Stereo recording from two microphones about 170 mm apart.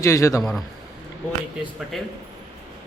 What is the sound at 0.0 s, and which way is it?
Speech, 20° left (ahead or behind).